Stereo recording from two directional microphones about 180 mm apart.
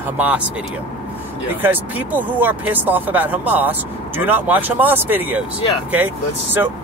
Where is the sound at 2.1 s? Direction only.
10° right (ahead or behind).